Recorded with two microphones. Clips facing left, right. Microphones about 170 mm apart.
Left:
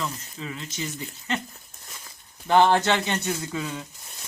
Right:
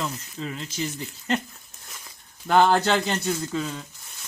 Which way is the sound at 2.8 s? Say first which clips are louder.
Right 1 dB; 35° right (ahead or behind).